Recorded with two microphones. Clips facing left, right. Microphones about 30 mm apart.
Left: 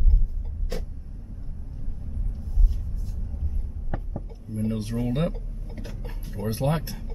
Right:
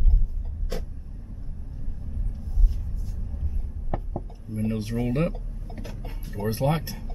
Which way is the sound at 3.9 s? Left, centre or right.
Centre.